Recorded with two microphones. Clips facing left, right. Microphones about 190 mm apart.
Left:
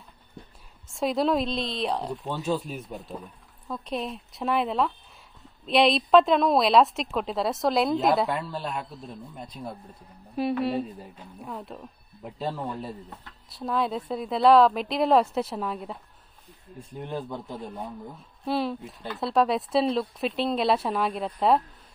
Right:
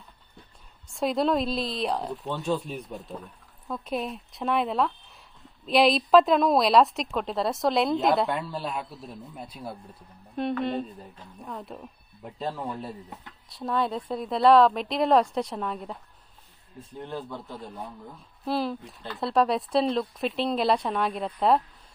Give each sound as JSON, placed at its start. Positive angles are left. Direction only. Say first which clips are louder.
{"t": 0.8, "sound": "a woman's voice", "louder": "even", "side_deg": 0}
{"t": 10.6, "sound": "a woman's voice", "louder": "left 2 dB", "side_deg": 5}
{"t": 16.7, "sound": "a man's voice", "louder": "left 2 dB", "side_deg": 15}
{"t": 18.4, "sound": "a woman's voice", "louder": "left 1 dB", "side_deg": 0}